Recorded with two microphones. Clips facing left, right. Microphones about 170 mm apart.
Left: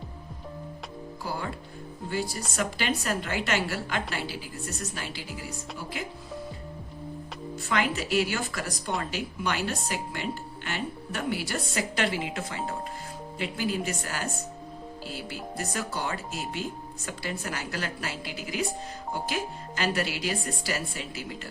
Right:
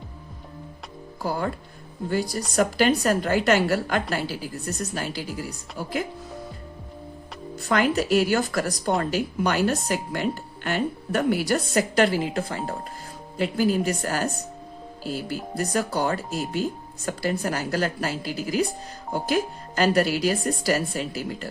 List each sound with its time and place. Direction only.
1.2 s speech: 45° right (ahead or behind)
2.6 s speech: 40° right (ahead or behind)
7.7 s speech: 45° right (ahead or behind)